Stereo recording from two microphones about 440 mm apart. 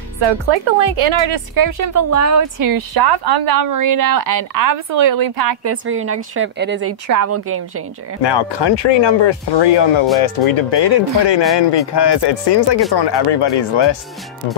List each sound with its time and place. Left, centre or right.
0.2 s a woman's voice: right
1.5 s speech: right
5.6 s a woman's voice: right
8.2 s speech: left